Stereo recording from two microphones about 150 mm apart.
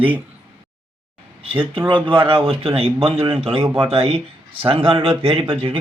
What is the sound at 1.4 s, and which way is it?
Speech, 35° right (ahead or behind).